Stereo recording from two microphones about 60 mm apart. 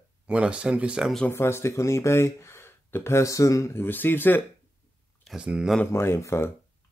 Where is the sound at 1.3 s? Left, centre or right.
Left.